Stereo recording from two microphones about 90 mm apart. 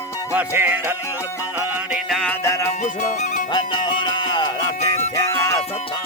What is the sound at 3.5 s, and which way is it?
Music, 60° left (ahead or behind).